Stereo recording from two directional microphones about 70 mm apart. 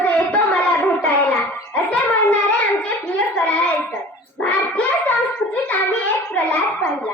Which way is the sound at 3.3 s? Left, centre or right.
Left.